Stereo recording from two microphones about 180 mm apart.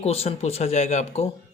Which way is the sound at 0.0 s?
35° left (ahead or behind).